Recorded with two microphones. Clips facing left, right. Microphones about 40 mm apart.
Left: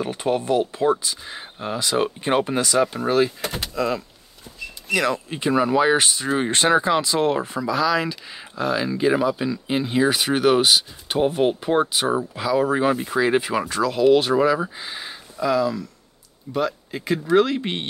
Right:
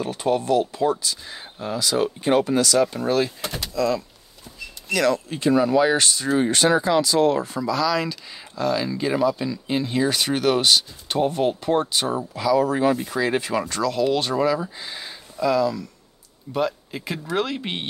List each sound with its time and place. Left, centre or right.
0.0 s speech: left
3.3 s speech: left
7.7 s speech: centre